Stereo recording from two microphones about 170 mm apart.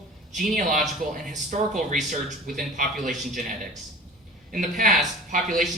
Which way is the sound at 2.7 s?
50° right (ahead or behind).